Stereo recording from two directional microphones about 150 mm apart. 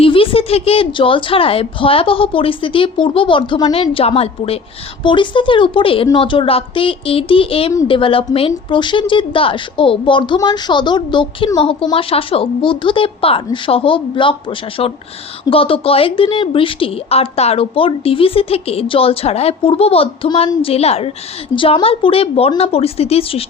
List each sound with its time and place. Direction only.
0.0 s a woman's voice: 35° left (ahead or behind)